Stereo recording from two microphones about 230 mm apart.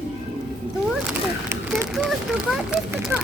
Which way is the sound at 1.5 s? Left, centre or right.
Centre.